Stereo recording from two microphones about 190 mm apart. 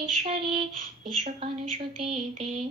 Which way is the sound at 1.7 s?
30° right (ahead or behind).